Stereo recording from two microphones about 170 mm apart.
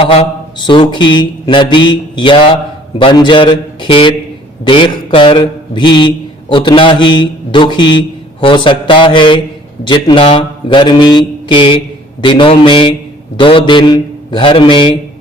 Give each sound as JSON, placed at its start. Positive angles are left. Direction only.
{"t": 0.0, "sound": "a man's voice", "side_deg": 35}